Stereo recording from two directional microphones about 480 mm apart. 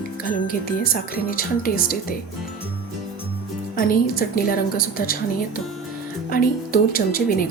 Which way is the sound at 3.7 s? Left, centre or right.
Centre.